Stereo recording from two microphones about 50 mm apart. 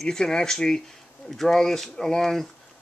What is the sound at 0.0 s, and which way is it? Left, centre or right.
Speech, centre.